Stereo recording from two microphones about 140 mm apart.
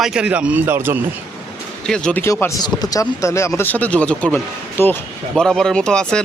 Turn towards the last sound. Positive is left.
turn(degrees=5)  # may be behind; listen again after turning